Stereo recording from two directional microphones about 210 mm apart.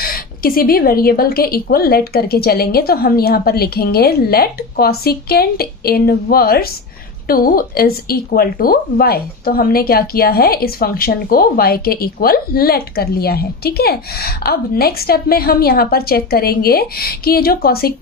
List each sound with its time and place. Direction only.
0.0 s speech: 45° left (ahead or behind)